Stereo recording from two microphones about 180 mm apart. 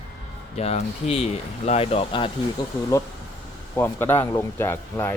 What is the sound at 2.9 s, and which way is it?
Speech, 15° left (ahead or behind).